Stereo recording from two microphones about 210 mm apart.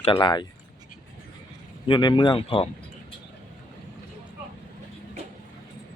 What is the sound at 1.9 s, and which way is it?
Speech, 20° left (ahead or behind).